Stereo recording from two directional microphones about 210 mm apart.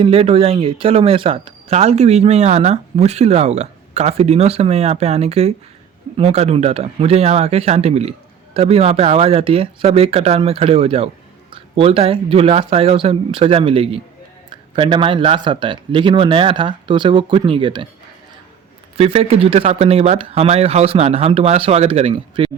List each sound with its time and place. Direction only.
0.0 s speech: 30° right (ahead or behind)
18.9 s speech: 30° right (ahead or behind)